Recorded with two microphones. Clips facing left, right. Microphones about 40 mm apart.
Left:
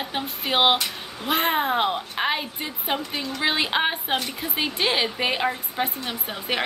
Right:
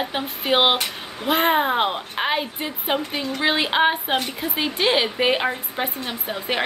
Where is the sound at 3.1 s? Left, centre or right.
Right.